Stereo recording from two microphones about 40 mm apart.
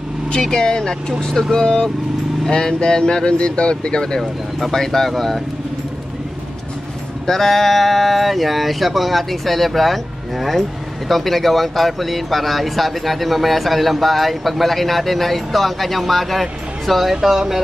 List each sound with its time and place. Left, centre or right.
0.3 s speech: centre
4.2 s speech: centre
7.2 s speech: centre
11.1 s speech: centre